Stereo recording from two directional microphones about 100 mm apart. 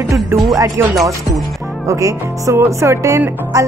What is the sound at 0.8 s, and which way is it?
Music, 25° right (ahead or behind).